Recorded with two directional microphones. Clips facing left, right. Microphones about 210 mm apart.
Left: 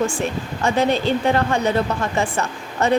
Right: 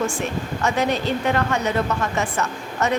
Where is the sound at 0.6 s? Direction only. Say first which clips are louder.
Left 4 dB; 30° left (ahead or behind).